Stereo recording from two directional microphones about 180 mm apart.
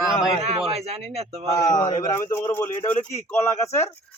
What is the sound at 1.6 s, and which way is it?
A man's voice, 20° left (ahead or behind).